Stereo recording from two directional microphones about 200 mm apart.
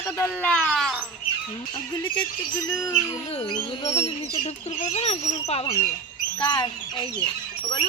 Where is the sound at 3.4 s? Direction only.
30° left (ahead or behind).